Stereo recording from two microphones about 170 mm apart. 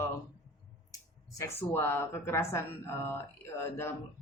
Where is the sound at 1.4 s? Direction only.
15° left (ahead or behind).